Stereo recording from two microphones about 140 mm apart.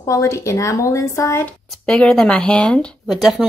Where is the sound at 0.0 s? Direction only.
20° left (ahead or behind).